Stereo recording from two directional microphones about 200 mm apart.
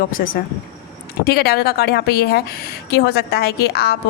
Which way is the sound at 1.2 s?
50° left (ahead or behind).